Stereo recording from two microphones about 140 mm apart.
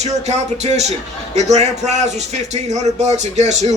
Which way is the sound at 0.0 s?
55° right (ahead or behind).